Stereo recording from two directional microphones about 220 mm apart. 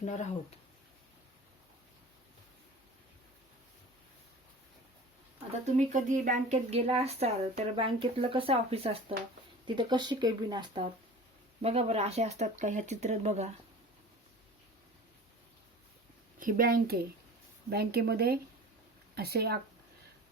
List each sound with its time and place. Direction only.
0.0 s speech: 30° left (ahead or behind)
5.9 s speech: 35° right (ahead or behind)
16.4 s speech: 40° right (ahead or behind)